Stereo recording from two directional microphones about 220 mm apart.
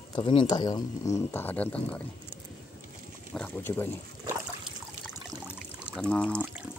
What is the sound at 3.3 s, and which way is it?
Speech, 5° left (ahead or behind).